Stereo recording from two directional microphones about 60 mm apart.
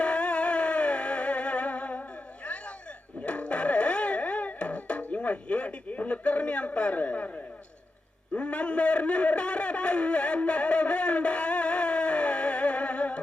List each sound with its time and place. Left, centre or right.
0.0 s music: centre
8.4 s a man's voice: centre